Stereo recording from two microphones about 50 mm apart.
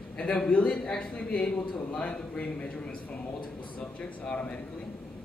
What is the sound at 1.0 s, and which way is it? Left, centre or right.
A man's voice, left.